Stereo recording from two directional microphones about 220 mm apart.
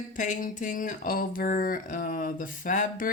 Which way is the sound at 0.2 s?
35° left (ahead or behind).